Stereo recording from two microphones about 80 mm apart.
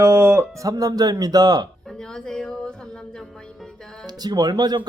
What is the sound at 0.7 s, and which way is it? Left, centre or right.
Speech, right.